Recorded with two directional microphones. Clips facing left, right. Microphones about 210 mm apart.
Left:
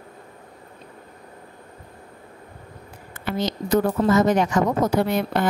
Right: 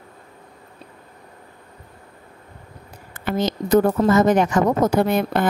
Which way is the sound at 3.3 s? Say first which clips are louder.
Right 3 dB; 50° right (ahead or behind).